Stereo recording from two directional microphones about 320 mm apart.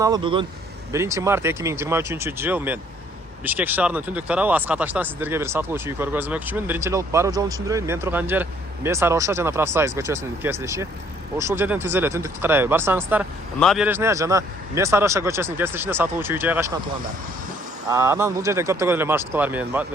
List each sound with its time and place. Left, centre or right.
0.0 s speech: centre
17.8 s speech: centre